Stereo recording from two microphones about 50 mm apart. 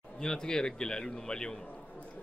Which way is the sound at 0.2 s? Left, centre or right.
Centre.